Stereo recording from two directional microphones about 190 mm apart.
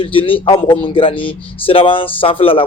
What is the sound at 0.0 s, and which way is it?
A man's voice, 30° left (ahead or behind).